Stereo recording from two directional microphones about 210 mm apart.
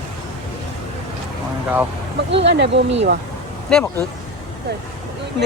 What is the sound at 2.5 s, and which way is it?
Speech, 55° right (ahead or behind).